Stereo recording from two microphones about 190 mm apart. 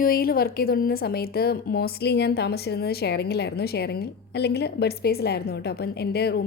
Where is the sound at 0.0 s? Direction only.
50° left (ahead or behind).